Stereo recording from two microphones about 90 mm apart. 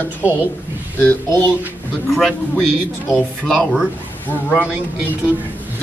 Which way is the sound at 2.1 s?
Centre (ahead or behind).